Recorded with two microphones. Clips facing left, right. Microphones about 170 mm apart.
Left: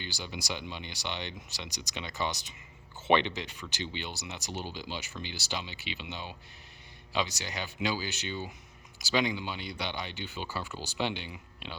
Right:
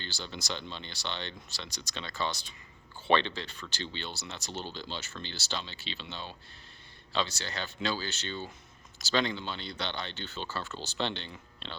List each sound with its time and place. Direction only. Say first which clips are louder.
0.0 s speech: left 1 dB; 15° left (ahead or behind)